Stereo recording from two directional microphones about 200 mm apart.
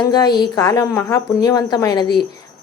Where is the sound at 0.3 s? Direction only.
15° left (ahead or behind).